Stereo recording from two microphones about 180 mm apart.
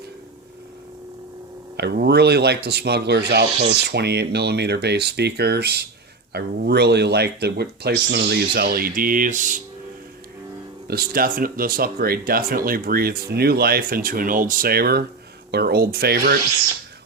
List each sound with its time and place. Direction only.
1.7 s speech: 65° right (ahead or behind); by 9.6 s 45° right (ahead or behind)
10.8 s speech: 60° right (ahead or behind)